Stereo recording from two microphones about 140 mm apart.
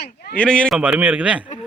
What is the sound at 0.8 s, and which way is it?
Speech, 10° right (ahead or behind).